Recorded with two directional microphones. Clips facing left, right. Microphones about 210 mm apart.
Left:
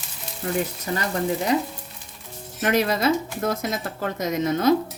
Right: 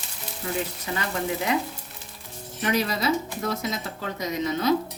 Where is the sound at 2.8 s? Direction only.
50° left (ahead or behind).